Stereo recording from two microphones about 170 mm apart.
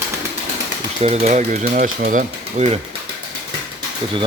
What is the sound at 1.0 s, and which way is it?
Speech, 40° right (ahead or behind).